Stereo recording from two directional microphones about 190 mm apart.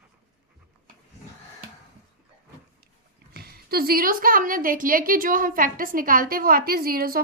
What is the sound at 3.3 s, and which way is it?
A woman's voice, 55° right (ahead or behind).